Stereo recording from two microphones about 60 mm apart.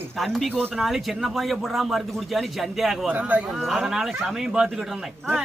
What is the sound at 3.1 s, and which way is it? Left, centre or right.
Speech, right.